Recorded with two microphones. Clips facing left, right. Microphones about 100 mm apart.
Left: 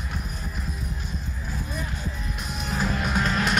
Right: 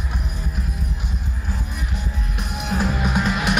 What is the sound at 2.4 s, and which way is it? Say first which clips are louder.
Music: right 6 dB; 60° right (ahead or behind).